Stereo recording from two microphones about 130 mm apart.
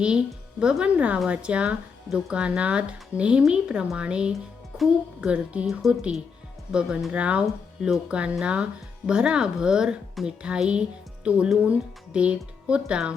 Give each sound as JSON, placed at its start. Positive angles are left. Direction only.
{"t": 0.6, "sound": "speech", "side_deg": -5}